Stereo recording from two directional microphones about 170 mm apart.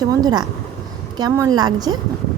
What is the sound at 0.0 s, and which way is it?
Speech, 20° right (ahead or behind).